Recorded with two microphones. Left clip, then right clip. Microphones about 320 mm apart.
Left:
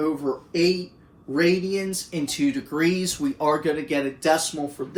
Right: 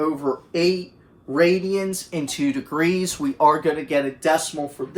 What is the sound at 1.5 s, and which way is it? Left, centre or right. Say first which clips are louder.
Speech: right 2 dB; centre.